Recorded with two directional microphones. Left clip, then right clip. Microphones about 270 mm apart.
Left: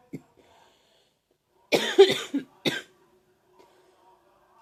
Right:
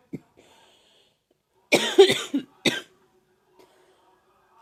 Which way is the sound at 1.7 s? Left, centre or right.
Centre.